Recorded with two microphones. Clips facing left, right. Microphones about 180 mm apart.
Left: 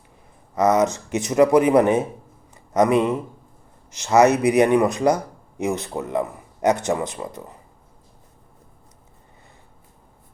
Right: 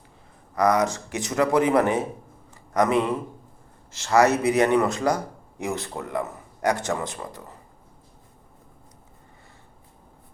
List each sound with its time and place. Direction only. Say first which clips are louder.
0.5 s speech: left 3 dB; 20° left (ahead or behind)